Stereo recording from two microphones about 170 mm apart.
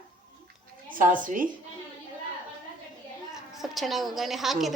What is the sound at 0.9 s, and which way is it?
Speech, 50° right (ahead or behind).